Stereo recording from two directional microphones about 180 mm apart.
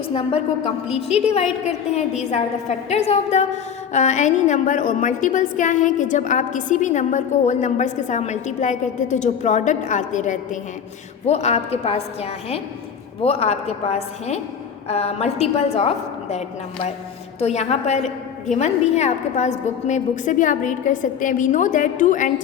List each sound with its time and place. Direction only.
0.1 s a woman's voice: 30° left (ahead or behind)